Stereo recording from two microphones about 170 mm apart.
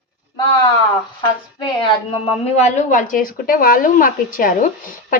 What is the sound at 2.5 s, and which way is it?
A woman's voice, 45° left (ahead or behind).